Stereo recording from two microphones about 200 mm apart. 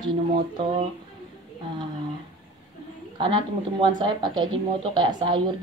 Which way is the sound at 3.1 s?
25° right (ahead or behind).